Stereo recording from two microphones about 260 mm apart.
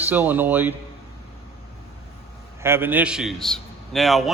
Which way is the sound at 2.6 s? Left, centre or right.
Centre.